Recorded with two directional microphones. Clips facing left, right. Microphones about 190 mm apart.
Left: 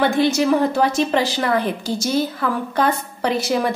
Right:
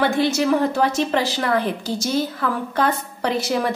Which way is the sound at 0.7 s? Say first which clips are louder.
Left 2 dB; 15° left (ahead or behind).